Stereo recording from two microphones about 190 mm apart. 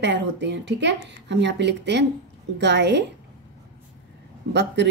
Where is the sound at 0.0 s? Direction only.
70° right (ahead or behind).